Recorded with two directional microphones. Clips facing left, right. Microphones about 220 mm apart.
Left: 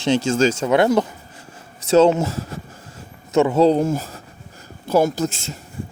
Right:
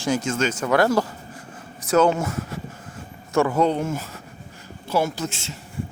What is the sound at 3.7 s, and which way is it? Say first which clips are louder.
A man's voice: left 7 dB; 35° left (ahead or behind).